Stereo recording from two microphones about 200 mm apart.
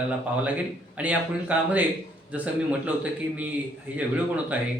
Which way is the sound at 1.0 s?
5° right (ahead or behind).